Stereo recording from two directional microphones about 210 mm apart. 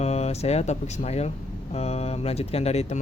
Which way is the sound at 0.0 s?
30° left (ahead or behind).